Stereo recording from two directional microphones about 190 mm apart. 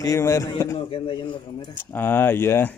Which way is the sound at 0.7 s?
25° left (ahead or behind).